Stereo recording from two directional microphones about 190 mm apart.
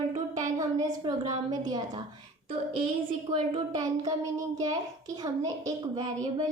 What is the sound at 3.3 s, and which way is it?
A child's voice, 25° right (ahead or behind).